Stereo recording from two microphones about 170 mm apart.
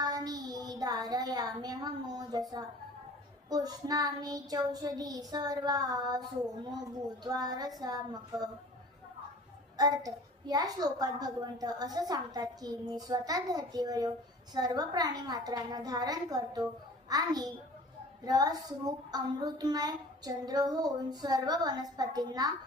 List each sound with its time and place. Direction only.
0.0 s child singing: 20° right (ahead or behind)
3.5 s a child's voice: 20° right (ahead or behind)
9.7 s a child's voice: 20° right (ahead or behind)